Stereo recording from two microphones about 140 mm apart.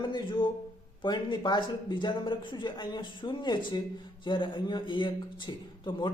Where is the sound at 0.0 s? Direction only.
30° left (ahead or behind).